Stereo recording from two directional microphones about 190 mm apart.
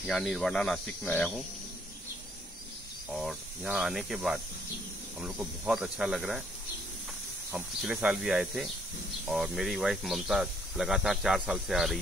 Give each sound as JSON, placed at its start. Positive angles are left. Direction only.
{"t": 0.0, "sound": "speech", "side_deg": 0}
{"t": 3.1, "sound": "speech", "side_deg": 0}
{"t": 7.5, "sound": "speech", "side_deg": -5}